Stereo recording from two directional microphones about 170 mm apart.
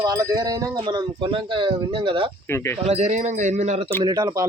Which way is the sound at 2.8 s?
40° right (ahead or behind).